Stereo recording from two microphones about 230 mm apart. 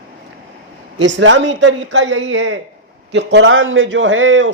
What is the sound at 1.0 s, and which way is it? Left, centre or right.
A man's voice, right.